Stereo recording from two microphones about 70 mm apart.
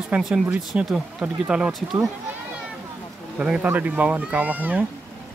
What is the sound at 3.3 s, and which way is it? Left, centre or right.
Speech, centre.